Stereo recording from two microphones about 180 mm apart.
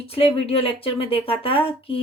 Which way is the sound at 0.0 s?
35° left (ahead or behind).